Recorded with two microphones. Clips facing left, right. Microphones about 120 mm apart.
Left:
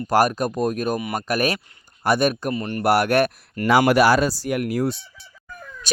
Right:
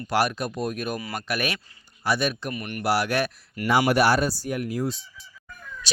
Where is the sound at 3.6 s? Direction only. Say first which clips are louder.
Left 4 dB; 90° left; by 5.0 s 65° left (ahead or behind).